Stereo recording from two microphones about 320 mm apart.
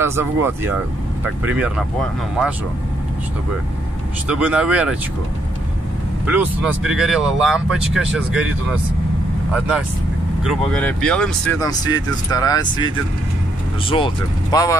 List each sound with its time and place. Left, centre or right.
0.0 s speech: centre
4.3 s speech: centre
6.2 s speech: centre
9.5 s speech: centre